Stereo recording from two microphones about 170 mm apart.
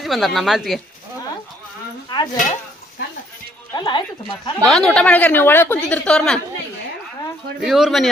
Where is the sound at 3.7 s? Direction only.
25° left (ahead or behind).